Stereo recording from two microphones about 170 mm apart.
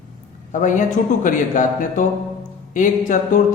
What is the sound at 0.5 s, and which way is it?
Speech, 50° left (ahead or behind).